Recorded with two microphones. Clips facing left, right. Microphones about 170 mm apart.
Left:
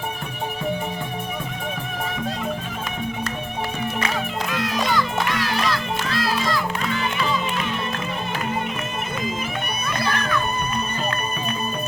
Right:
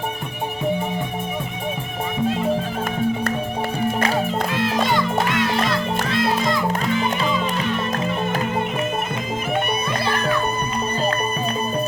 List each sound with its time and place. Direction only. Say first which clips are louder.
3.9 s music: right 5 dB; 35° right (ahead or behind)
10.0 s music: even; 30° right (ahead or behind)